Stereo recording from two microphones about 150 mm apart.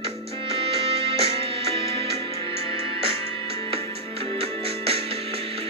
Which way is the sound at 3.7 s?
40° right (ahead or behind).